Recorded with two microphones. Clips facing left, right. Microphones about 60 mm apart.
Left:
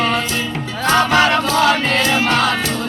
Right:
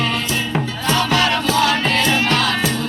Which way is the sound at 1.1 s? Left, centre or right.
Left.